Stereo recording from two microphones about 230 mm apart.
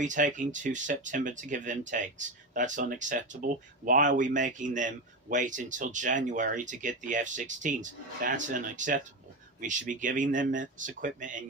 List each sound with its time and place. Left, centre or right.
0.0 s speech: right